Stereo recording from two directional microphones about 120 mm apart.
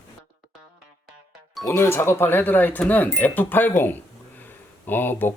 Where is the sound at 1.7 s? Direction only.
20° left (ahead or behind).